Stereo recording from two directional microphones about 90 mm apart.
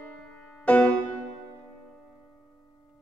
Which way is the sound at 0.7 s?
15° left (ahead or behind).